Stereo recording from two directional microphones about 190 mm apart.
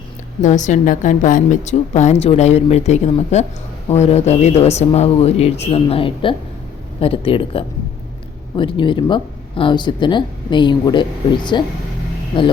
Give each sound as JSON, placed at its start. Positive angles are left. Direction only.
{"t": 0.4, "sound": "a woman's voice", "side_deg": 40}